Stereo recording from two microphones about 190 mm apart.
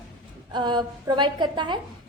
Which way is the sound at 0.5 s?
25° right (ahead or behind).